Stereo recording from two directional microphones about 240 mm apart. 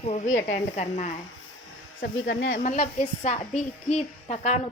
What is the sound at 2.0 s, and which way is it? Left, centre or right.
Speech, left.